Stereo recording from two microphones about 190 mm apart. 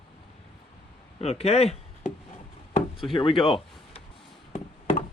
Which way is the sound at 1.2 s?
35° left (ahead or behind).